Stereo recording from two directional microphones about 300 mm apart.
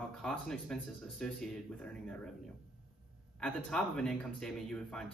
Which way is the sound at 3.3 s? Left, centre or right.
Centre.